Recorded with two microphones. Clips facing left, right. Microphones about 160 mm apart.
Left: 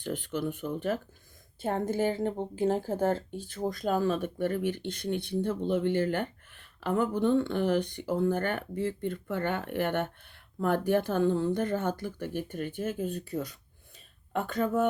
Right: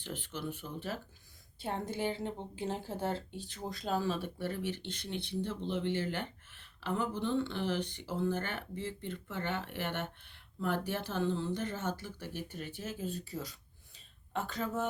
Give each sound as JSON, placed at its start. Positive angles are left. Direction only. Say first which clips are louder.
{"t": 0.0, "sound": "speech", "louder": "left 8 dB", "side_deg": 45}